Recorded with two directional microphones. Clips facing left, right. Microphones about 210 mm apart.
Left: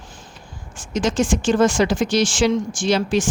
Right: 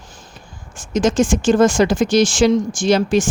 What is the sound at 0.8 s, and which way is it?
Speech, 45° right (ahead or behind).